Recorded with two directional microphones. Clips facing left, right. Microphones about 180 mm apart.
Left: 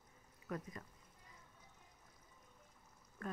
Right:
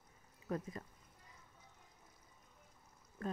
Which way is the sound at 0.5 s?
30° right (ahead or behind).